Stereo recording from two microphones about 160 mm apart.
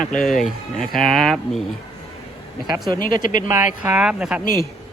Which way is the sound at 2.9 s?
60° left (ahead or behind).